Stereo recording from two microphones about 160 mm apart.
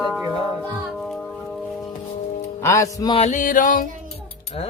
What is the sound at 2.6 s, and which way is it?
Speech, 20° left (ahead or behind).